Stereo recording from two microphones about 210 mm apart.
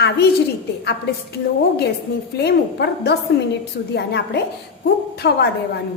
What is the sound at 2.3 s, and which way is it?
A woman's voice, 50° left (ahead or behind).